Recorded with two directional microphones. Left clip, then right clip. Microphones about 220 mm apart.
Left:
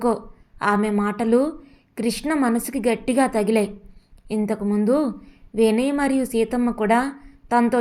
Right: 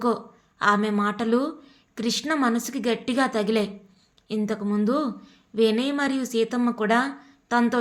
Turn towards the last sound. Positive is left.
turn(degrees=0)  # may be behind; listen again after turning